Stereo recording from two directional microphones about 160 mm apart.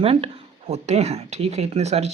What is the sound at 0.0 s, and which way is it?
Speech, 35° right (ahead or behind).